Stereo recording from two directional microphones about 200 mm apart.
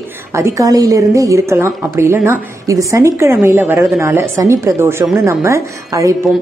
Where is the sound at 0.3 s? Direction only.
15° right (ahead or behind).